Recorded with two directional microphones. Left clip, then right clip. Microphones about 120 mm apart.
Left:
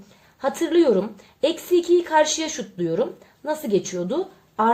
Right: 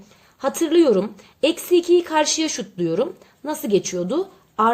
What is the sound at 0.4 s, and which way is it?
A woman's voice, 35° right (ahead or behind).